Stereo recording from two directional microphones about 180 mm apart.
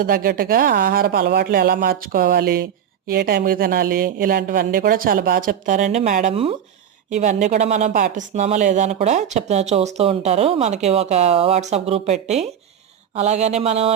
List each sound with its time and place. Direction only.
0.0 s speech: 55° right (ahead or behind); by 13.9 s 35° right (ahead or behind)